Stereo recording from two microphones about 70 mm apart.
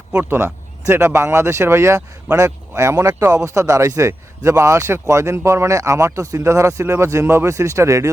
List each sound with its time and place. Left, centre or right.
0.3 s a man's voice: right